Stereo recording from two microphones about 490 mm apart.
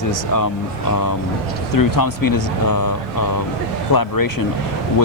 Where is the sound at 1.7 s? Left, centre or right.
Left.